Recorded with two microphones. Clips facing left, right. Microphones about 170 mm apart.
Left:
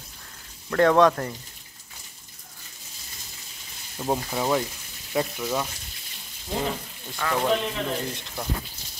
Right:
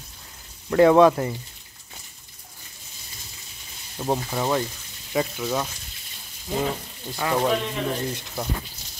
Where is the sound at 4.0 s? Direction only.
Centre (ahead or behind).